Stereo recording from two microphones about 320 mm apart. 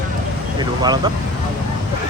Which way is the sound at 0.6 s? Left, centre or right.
Centre.